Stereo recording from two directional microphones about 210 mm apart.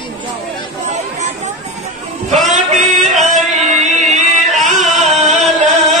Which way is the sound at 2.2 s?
Centre (ahead or behind).